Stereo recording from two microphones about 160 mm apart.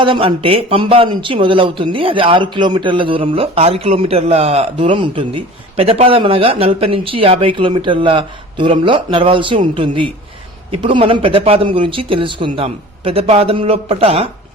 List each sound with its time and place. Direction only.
0.0 s speech: 30° right (ahead or behind)